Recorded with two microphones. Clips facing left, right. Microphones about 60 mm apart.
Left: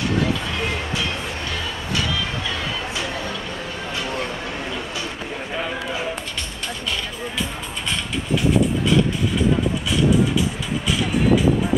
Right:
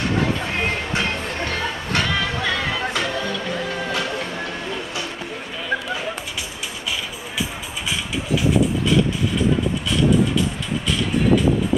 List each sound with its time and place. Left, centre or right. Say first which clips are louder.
0.5 s music: right 2 dB; right
8.5 s vehicle: even; centre